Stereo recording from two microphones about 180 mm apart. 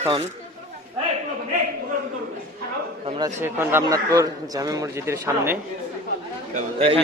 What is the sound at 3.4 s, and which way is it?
A man's voice, 15° right (ahead or behind).